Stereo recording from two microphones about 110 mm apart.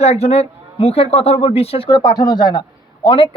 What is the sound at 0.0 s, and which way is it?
Speech, 75° left (ahead or behind).